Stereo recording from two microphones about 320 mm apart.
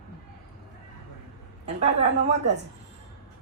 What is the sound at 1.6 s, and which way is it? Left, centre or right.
Speech, right.